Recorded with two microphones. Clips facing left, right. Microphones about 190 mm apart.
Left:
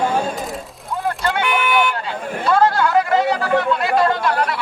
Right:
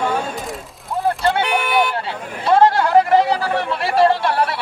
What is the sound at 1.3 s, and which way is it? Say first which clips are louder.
Vehicle: left 2 dB; 35° right (ahead or behind).